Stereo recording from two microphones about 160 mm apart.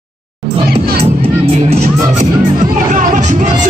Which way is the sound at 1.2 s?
40° right (ahead or behind).